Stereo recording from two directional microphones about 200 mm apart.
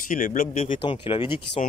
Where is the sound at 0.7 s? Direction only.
25° left (ahead or behind).